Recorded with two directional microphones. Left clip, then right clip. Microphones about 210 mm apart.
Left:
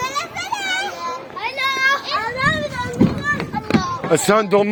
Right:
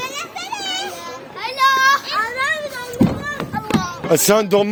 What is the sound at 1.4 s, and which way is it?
Children playing, 30° right (ahead or behind).